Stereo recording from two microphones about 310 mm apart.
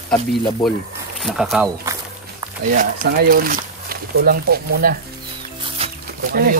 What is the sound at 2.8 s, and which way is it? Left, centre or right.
Speech, right.